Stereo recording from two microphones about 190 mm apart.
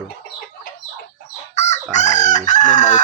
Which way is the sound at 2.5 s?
40° left (ahead or behind).